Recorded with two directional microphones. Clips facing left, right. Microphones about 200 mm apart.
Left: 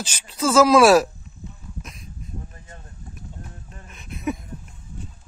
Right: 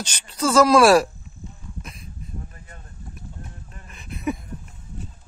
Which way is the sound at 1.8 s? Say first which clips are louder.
Even; centre (ahead or behind).